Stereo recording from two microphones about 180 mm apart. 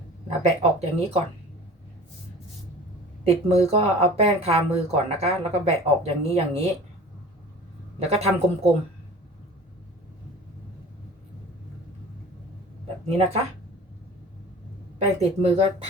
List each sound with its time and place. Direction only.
0.4 s speech: 35° right (ahead or behind)
3.2 s speech: 35° right (ahead or behind)
7.9 s speech: 35° right (ahead or behind)
13.1 s speech: 35° right (ahead or behind)
15.0 s speech: 35° right (ahead or behind)